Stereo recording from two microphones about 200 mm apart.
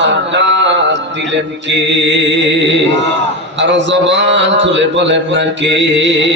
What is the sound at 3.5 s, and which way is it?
A man's voice, 65° right (ahead or behind).